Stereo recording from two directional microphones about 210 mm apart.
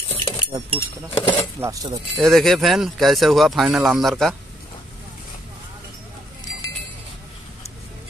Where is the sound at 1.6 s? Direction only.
15° right (ahead or behind).